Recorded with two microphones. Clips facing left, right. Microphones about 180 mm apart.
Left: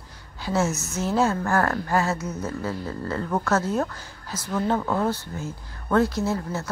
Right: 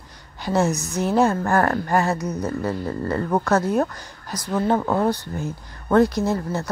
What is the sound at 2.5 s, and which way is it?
Music, 60° right (ahead or behind).